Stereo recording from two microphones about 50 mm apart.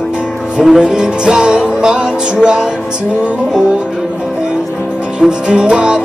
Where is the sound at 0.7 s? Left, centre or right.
Centre.